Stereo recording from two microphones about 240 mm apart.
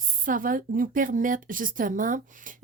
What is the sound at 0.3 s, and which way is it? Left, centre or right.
A woman's voice, right.